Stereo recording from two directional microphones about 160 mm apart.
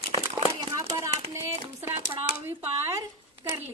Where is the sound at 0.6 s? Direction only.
15° right (ahead or behind).